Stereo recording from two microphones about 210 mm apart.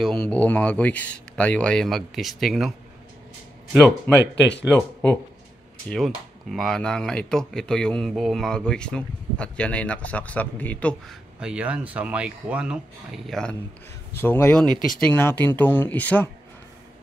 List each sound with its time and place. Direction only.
0.0 s speech: 5° left (ahead or behind)
4.1 s speech: 10° left (ahead or behind)
5.9 s speech: centre (ahead or behind)
11.3 s speech: 5° right (ahead or behind)